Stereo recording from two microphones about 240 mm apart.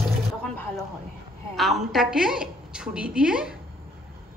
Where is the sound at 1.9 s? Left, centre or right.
Centre.